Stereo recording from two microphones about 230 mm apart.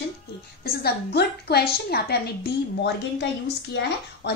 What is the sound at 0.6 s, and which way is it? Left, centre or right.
A woman's voice, left.